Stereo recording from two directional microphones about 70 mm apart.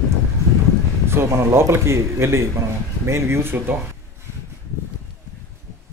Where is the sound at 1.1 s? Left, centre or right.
Right.